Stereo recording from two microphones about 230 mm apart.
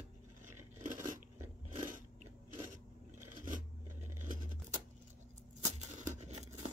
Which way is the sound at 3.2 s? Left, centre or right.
Right.